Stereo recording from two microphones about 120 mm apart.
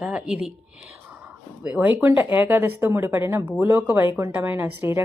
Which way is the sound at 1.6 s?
10° right (ahead or behind).